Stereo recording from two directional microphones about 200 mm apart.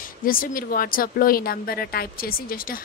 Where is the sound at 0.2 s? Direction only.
45° left (ahead or behind).